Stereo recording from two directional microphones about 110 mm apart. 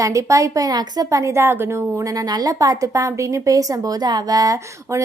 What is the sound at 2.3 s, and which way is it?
A woman's voice, 35° right (ahead or behind).